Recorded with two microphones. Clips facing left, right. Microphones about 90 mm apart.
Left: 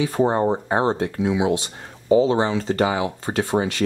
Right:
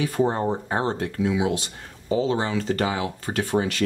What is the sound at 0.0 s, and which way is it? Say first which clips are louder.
Speech: left 3 dB; 25° left (ahead or behind).